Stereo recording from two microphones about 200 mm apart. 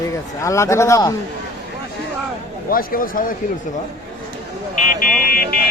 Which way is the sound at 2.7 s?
45° left (ahead or behind).